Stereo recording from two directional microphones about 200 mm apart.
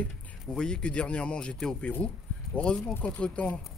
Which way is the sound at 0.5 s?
5° left (ahead or behind).